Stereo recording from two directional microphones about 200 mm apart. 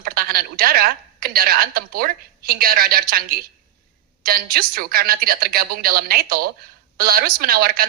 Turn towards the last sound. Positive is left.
turn(degrees=-50)  # may be behind; listen again after turning